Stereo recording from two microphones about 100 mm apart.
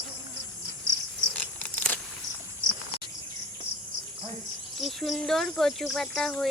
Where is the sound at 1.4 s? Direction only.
15° left (ahead or behind).